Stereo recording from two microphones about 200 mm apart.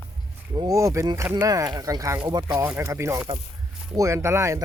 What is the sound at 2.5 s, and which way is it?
A man's voice, 10° right (ahead or behind).